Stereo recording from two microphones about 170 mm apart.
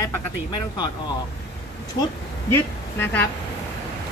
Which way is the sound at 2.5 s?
10° left (ahead or behind).